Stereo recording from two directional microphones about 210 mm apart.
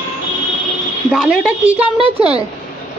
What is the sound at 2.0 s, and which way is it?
Speech, 25° right (ahead or behind).